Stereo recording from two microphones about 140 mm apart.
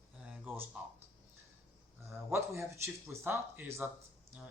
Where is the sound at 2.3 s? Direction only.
20° right (ahead or behind).